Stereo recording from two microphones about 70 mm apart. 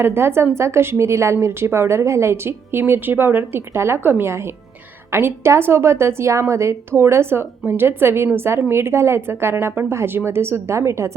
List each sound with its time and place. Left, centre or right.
0.0 s a woman's voice: right